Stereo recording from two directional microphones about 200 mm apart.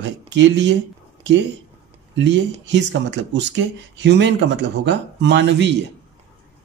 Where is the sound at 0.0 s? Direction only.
60° right (ahead or behind).